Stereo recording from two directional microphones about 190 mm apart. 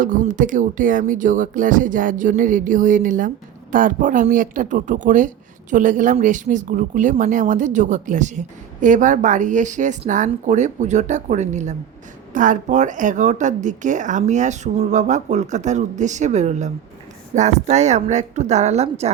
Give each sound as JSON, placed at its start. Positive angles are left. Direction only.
{"t": 0.0, "sound": "speech", "side_deg": -45}